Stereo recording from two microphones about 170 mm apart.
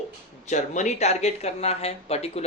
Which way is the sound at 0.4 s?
45° left (ahead or behind).